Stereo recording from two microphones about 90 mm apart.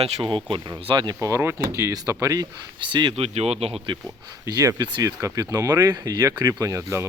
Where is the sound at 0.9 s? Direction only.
55° right (ahead or behind).